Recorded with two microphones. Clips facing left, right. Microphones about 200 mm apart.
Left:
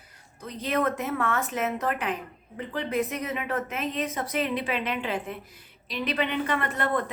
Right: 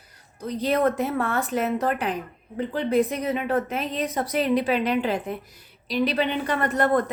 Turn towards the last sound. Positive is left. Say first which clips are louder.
# right 6 dB
turn(degrees=-40)  # may be behind; listen again after turning